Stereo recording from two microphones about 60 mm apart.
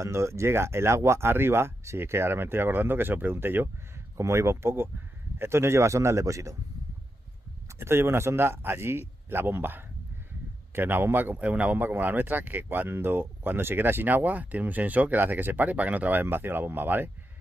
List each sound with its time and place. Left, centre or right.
0.0 s speech: right
4.2 s speech: right
7.8 s speech: right
11.3 s speech: right